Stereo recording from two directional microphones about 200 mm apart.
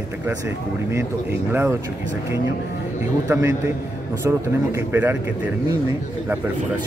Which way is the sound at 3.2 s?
10° right (ahead or behind).